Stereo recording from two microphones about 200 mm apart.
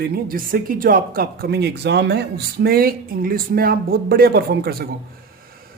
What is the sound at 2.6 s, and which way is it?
Speech, 50° right (ahead or behind).